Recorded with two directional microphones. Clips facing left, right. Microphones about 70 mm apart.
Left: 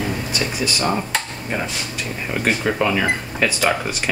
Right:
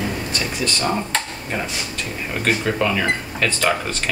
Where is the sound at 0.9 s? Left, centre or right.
Centre.